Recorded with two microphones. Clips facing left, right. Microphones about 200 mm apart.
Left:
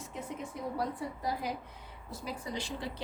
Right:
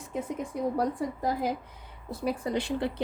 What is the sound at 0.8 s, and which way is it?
A woman's voice, 50° right (ahead or behind).